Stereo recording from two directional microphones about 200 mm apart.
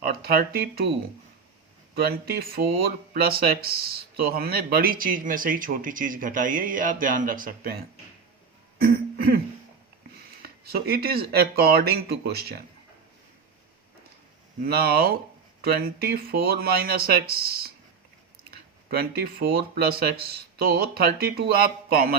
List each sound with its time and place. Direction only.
0.0 s speech: 50° right (ahead or behind)
2.0 s speech: 50° right (ahead or behind)
8.8 s throat clearing: 50° right (ahead or behind)
10.4 s speech: 50° right (ahead or behind)
14.6 s speech: 50° right (ahead or behind)
18.9 s speech: 50° right (ahead or behind)